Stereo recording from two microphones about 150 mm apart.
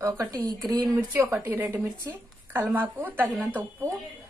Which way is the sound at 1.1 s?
15° right (ahead or behind).